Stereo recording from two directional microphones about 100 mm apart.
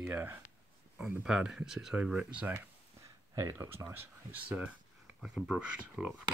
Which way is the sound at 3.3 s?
30° right (ahead or behind).